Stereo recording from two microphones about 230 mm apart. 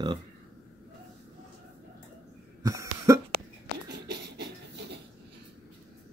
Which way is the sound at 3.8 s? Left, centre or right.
Right.